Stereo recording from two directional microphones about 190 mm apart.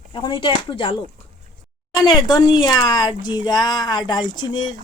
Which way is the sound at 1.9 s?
20° left (ahead or behind).